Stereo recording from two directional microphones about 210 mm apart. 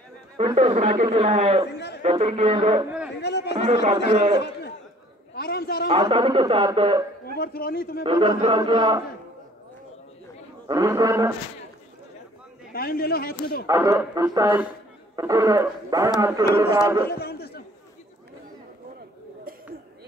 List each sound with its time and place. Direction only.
0.4 s a man's voice: 25° right (ahead or behind)
3.2 s a sound: 55° left (ahead or behind)
4.1 s a man's voice: 30° right (ahead or behind)
4.4 s a sound: 55° left (ahead or behind)
5.9 s a man's voice: 25° right (ahead or behind)
7.3 s a man's voice: 45° left (ahead or behind)
8.0 s a man's voice: 25° right (ahead or behind)
10.7 s speech: 15° right (ahead or behind)
12.7 s a man's voice: 45° left (ahead or behind)
13.7 s speech: 15° right (ahead or behind)
17.1 s a man's voice: 50° left (ahead or behind)